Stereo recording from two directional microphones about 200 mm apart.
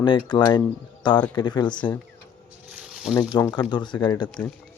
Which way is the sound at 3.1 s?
20° left (ahead or behind).